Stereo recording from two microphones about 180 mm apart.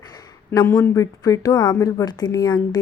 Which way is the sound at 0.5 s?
15° left (ahead or behind).